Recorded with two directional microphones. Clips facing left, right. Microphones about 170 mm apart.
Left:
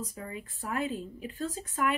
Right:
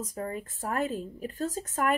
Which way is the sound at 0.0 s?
45° right (ahead or behind).